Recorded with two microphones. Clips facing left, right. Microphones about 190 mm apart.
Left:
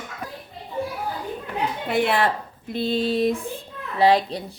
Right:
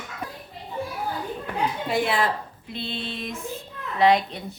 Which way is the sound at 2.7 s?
40° left (ahead or behind).